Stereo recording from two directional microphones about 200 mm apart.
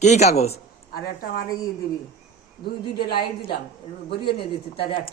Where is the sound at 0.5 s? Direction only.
50° left (ahead or behind).